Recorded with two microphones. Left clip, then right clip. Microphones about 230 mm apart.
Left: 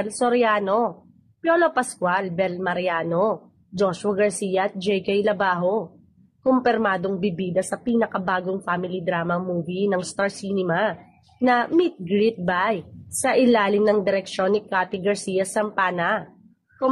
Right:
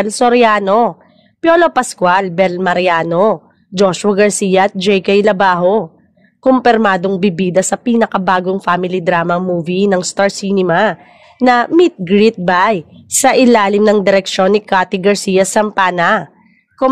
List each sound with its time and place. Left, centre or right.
0.0 s a woman's voice: right